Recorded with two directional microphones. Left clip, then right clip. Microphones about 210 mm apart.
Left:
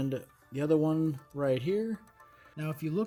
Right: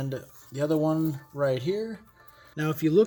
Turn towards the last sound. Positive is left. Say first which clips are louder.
# right 12 dB
turn(degrees=5)  # may be behind; listen again after turning